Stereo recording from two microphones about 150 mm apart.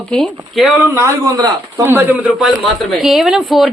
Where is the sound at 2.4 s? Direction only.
Centre (ahead or behind).